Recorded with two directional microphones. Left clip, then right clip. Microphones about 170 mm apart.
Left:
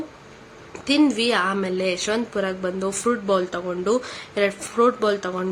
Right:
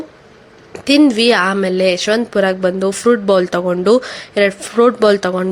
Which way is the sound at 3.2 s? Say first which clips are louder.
Right 9 dB; 40° right (ahead or behind).